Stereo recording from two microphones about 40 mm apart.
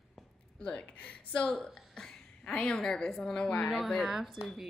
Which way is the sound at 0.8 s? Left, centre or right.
Left.